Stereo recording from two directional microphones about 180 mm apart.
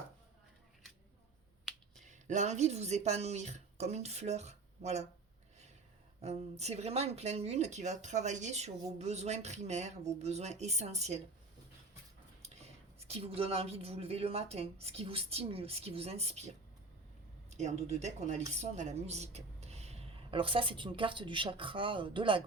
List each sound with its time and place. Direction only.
2.0 s speech: 40° right (ahead or behind)
6.2 s speech: 35° right (ahead or behind)
12.4 s speech: 35° right (ahead or behind)
17.5 s a woman's voice: 40° right (ahead or behind)